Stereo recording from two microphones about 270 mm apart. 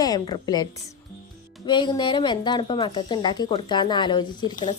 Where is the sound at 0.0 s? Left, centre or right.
Centre.